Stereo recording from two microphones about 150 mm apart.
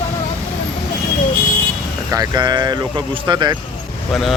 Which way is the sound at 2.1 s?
25° right (ahead or behind).